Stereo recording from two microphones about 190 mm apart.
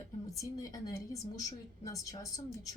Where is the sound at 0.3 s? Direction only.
20° left (ahead or behind).